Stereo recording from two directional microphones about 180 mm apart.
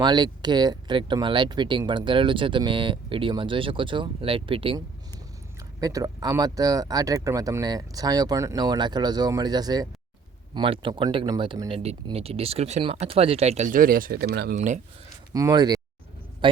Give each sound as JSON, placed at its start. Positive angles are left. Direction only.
{"t": 0.0, "sound": "speech", "side_deg": -25}
{"t": 5.8, "sound": "speech", "side_deg": -20}
{"t": 14.5, "sound": "speech", "side_deg": -45}
{"t": 15.3, "sound": "speech", "side_deg": -20}